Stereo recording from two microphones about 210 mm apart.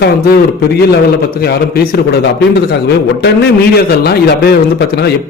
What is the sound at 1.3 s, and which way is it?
A man's voice, 45° left (ahead or behind).